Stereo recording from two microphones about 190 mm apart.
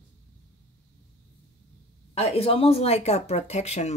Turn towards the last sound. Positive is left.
turn(degrees=35)  # may be behind; listen again after turning